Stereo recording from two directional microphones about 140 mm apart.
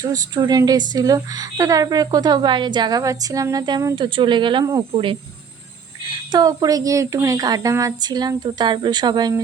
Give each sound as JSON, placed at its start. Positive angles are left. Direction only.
{"t": 0.0, "sound": "a woman's voice", "side_deg": -30}
{"t": 6.1, "sound": "a woman's voice", "side_deg": -30}